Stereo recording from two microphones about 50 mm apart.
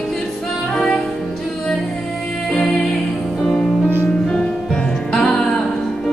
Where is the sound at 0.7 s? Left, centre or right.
Centre.